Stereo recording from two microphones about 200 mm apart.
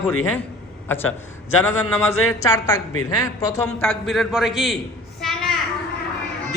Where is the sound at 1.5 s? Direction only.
90° left.